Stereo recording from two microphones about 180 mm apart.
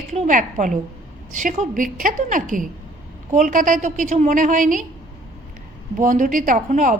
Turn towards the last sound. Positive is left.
turn(degrees=-45)  # may be behind; listen again after turning